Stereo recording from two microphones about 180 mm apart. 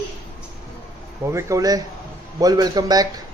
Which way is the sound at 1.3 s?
15° right (ahead or behind).